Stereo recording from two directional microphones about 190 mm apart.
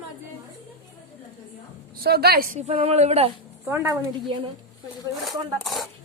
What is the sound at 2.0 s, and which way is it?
Speech, 55° right (ahead or behind).